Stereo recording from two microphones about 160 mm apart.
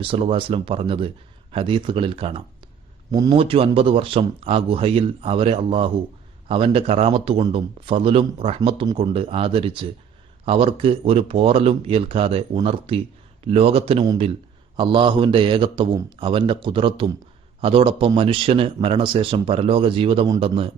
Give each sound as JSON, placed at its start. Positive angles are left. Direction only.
{"t": 0.0, "sound": "speech", "side_deg": -35}
{"t": 3.1, "sound": "a man's voice", "side_deg": -20}
{"t": 3.3, "sound": "speech", "side_deg": -35}